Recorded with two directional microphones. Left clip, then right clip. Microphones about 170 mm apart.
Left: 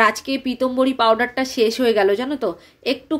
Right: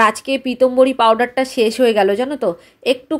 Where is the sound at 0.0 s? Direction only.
30° right (ahead or behind).